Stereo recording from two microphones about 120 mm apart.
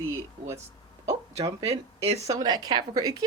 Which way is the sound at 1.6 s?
60° right (ahead or behind).